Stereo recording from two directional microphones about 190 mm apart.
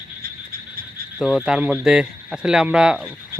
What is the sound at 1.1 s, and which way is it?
Speech, 5° right (ahead or behind).